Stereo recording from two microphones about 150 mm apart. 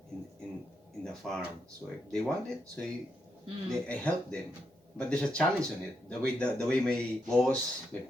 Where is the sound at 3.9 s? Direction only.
10° left (ahead or behind).